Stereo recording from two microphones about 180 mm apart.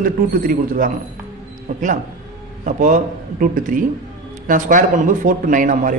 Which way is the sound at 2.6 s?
45° right (ahead or behind).